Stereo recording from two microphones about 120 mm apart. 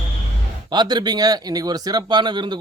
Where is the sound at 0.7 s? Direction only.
35° right (ahead or behind).